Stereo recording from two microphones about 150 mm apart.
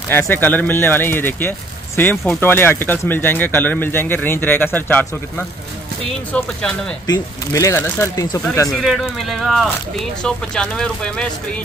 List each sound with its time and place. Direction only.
0.1 s speech: 15° left (ahead or behind)
6.3 s speech: 5° left (ahead or behind)
7.1 s speech: 20° left (ahead or behind)
8.7 s speech: centre (ahead or behind)